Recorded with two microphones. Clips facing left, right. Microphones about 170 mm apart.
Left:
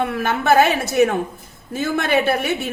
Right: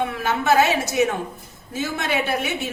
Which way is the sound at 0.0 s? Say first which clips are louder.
Left 2 dB; 55° left (ahead or behind).